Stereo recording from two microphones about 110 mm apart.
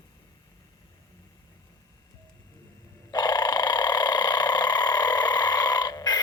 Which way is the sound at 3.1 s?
40° left (ahead or behind).